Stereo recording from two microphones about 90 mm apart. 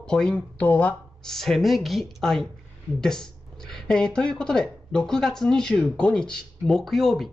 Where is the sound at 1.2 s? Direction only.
5° left (ahead or behind).